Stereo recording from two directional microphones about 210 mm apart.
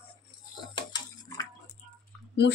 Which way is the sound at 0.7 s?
20° left (ahead or behind).